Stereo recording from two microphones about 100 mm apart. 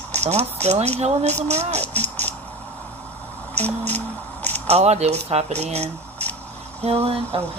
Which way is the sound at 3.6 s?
15° left (ahead or behind).